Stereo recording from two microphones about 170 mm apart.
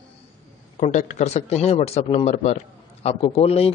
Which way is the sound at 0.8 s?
45° left (ahead or behind).